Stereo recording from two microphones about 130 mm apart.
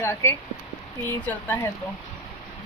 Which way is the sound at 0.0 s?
20° left (ahead or behind).